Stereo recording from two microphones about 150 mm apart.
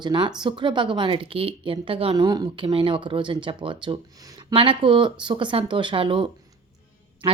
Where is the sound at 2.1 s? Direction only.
25° right (ahead or behind).